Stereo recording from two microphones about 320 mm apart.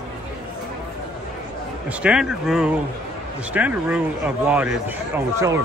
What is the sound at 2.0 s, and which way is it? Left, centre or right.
Speech, centre.